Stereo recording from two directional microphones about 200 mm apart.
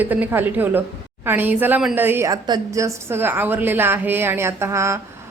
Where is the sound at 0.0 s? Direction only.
10° right (ahead or behind).